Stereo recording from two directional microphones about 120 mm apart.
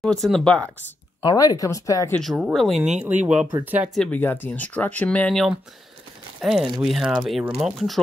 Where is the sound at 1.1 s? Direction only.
30° left (ahead or behind).